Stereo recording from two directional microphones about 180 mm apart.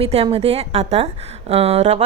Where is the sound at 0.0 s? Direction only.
35° right (ahead or behind).